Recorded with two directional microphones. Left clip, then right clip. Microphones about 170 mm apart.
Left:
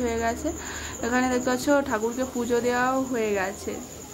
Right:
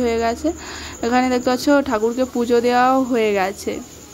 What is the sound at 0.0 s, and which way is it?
Speech, 35° right (ahead or behind).